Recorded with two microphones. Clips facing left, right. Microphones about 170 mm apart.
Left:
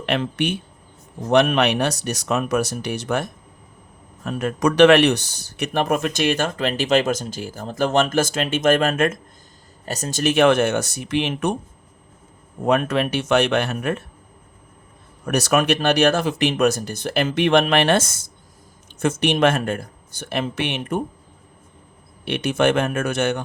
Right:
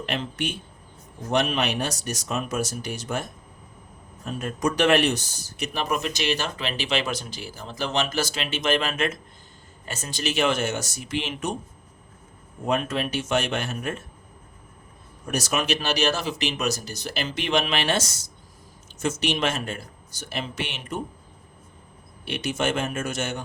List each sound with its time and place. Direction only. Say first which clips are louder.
0.0 s speech: left 7 dB; 65° left (ahead or behind)
12.6 s speech: left 6 dB; 60° left (ahead or behind)
15.3 s speech: left 7 dB; 65° left (ahead or behind)
22.2 s speech: left 7 dB; 60° left (ahead or behind)